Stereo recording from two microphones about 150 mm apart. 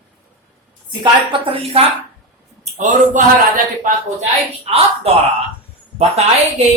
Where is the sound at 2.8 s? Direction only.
55° right (ahead or behind).